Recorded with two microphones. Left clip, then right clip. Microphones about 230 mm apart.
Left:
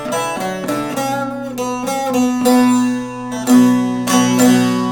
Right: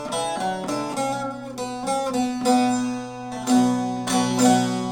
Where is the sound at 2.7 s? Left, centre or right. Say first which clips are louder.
Left 9 dB; left.